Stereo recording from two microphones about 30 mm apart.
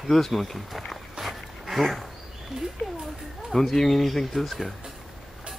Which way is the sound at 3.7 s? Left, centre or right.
Centre.